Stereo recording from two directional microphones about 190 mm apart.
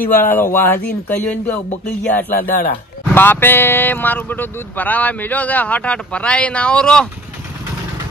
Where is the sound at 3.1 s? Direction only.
10° left (ahead or behind).